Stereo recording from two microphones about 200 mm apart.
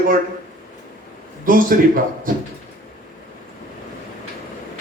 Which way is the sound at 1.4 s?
45° right (ahead or behind).